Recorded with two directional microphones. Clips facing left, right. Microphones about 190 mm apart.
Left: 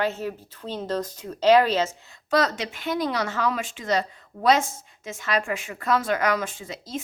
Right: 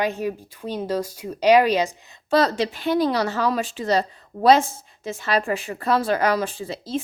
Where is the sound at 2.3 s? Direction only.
35° right (ahead or behind).